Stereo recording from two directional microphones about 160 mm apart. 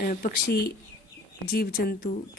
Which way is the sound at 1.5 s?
75° left (ahead or behind).